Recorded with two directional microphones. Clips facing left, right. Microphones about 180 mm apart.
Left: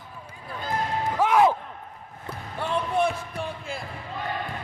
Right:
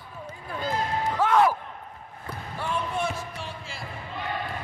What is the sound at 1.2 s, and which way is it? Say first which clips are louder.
Slam: left 1 dB; 10° left (ahead or behind).